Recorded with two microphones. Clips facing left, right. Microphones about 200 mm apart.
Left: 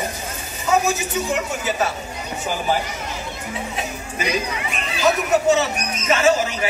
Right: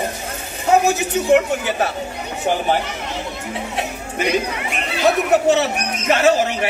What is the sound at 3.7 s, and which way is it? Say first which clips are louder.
Speech: right 3 dB; 60° right (ahead or behind).